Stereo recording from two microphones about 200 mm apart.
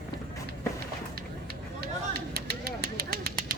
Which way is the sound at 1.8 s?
50° right (ahead or behind).